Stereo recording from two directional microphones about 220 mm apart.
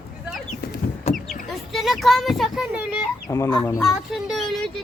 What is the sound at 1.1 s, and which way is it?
Vehicle, 30° left (ahead or behind).